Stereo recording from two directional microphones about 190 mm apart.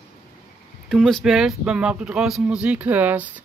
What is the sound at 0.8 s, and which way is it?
Speech, centre (ahead or behind).